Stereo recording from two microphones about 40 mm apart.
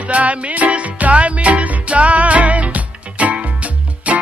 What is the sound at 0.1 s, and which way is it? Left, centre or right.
Music, right.